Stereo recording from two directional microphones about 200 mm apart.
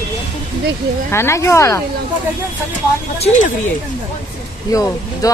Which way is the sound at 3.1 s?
35° left (ahead or behind).